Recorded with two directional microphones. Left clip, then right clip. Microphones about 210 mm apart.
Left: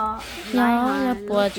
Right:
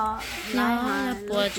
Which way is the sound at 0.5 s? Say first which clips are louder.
Left 5 dB; 30° left (ahead or behind).